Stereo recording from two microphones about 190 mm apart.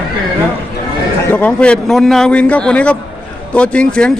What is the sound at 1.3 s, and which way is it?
Speech, 5° left (ahead or behind).